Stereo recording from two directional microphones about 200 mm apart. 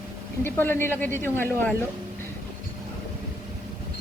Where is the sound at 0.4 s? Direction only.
10° left (ahead or behind).